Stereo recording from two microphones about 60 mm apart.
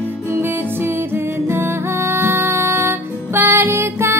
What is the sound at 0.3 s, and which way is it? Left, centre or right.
Music, right.